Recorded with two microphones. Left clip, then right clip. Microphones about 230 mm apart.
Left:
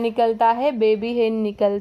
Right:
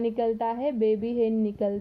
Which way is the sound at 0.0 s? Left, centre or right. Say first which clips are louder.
Left 9 dB; centre.